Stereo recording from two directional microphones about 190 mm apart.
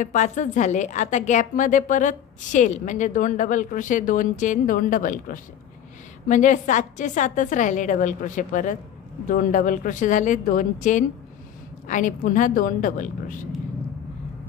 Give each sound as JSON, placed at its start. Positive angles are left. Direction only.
{"t": 0.0, "sound": "a woman's voice", "side_deg": 40}